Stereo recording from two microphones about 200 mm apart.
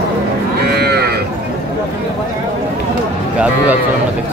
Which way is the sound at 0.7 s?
55° right (ahead or behind).